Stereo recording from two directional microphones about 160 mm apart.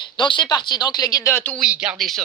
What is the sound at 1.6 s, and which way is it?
Speech, 5° right (ahead or behind).